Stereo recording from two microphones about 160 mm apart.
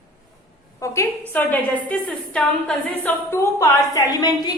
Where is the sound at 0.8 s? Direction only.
20° left (ahead or behind).